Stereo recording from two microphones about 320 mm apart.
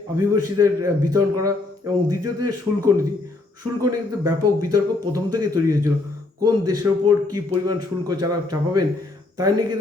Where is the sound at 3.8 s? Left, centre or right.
Centre.